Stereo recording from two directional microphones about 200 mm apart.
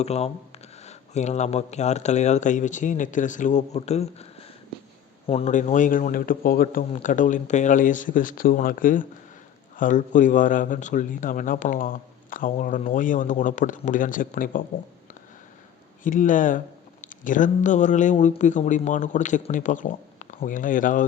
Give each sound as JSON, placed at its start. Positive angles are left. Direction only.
{"t": 0.0, "sound": "speech", "side_deg": 30}
{"t": 16.0, "sound": "speech", "side_deg": 40}